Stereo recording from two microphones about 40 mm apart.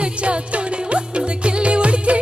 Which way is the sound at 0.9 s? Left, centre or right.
Right.